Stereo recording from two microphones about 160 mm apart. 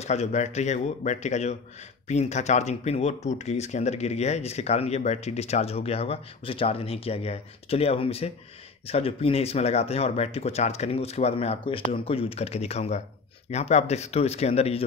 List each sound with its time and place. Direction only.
0.0 s a man's voice: 45° left (ahead or behind)